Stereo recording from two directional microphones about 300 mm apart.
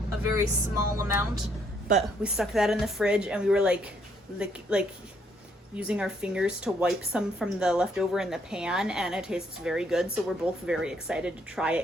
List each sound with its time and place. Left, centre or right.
0.2 s speech: centre